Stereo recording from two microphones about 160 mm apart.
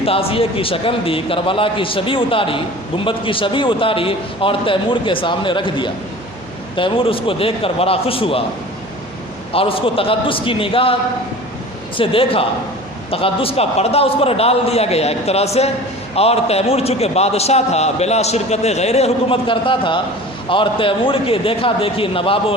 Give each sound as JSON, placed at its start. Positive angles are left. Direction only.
{"t": 0.0, "sound": "a man's voice", "side_deg": 35}
{"t": 9.5, "sound": "a man's voice", "side_deg": 35}
{"t": 11.9, "sound": "a man's voice", "side_deg": 35}